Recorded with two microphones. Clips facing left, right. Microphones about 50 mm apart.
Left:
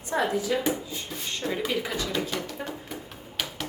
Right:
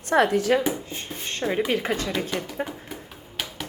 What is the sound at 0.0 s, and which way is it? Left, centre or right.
Speech, right.